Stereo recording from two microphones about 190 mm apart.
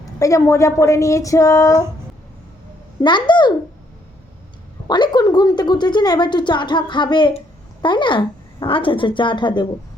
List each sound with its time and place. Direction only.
0.0 s speech: 15° left (ahead or behind)
3.0 s a woman's voice: 25° left (ahead or behind)
4.9 s a woman's voice: 20° left (ahead or behind)